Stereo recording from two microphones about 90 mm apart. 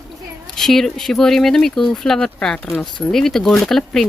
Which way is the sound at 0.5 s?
5° left (ahead or behind).